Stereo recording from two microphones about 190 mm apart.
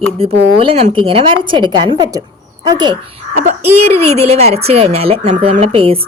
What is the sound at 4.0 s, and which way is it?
A woman's voice, 35° right (ahead or behind).